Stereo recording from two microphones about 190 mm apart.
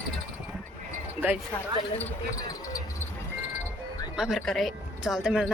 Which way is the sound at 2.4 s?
20° left (ahead or behind).